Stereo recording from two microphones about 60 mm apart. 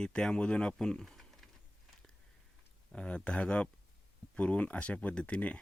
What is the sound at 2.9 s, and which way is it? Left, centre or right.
Speech, left.